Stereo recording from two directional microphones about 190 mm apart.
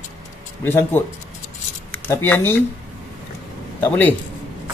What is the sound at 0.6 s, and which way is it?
Speech, 10° left (ahead or behind).